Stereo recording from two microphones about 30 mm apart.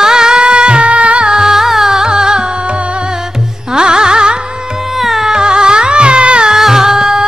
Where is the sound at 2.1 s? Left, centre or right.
Right.